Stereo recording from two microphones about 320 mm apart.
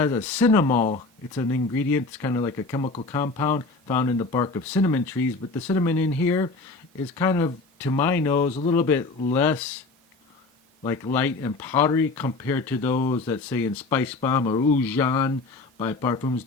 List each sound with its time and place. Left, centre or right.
0.0 s speech: centre
0.7 s speech: left
8.4 s speech: left
8.7 s speech: centre
10.8 s speech: centre
14.8 s speech: centre